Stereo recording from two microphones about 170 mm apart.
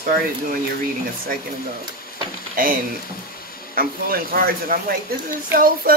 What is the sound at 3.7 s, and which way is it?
Speech, 60° right (ahead or behind).